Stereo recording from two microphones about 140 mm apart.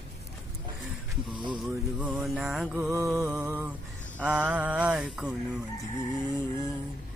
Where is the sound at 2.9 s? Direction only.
25° right (ahead or behind).